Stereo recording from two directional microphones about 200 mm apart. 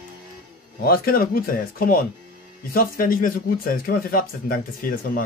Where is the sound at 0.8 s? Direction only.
45° left (ahead or behind).